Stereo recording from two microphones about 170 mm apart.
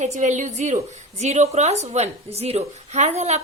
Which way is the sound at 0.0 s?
45° right (ahead or behind).